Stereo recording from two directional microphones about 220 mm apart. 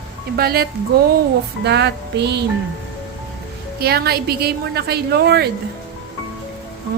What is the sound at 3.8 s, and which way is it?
A woman's voice, 45° right (ahead or behind).